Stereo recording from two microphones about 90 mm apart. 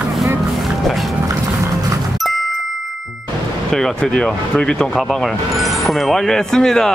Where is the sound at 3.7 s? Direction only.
10° left (ahead or behind).